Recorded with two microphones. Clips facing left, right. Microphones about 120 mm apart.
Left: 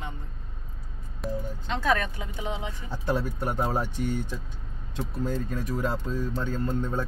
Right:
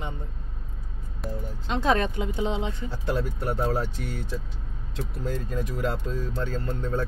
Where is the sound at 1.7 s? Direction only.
25° right (ahead or behind).